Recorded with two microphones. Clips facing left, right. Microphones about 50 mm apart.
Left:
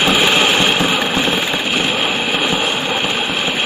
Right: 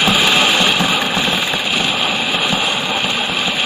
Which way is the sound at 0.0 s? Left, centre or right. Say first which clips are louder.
Even; left.